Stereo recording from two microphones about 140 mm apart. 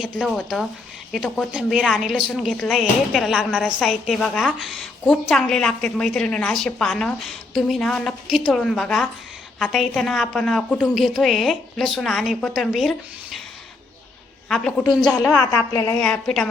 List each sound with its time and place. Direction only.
0.0 s a woman's voice: centre (ahead or behind)
14.5 s a woman's voice: centre (ahead or behind)
15.4 s a woman's voice: 25° left (ahead or behind)
16.0 s a woman's voice: 5° left (ahead or behind)